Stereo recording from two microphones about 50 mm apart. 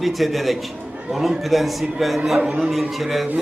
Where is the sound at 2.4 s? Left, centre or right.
Right.